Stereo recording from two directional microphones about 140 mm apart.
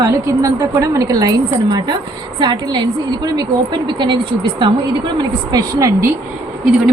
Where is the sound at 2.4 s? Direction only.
30° right (ahead or behind).